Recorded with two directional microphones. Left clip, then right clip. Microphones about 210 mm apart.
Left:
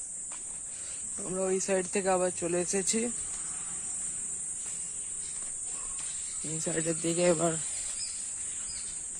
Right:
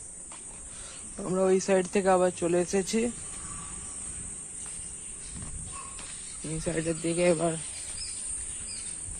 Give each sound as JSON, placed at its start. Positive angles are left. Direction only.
{"t": 1.2, "sound": "speech", "side_deg": -5}
{"t": 6.5, "sound": "speech", "side_deg": 10}
{"t": 6.8, "sound": "speech", "side_deg": 25}